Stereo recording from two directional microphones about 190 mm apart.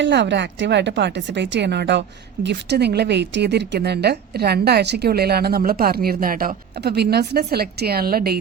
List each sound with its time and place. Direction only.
0.0 s a woman's voice: 65° right (ahead or behind)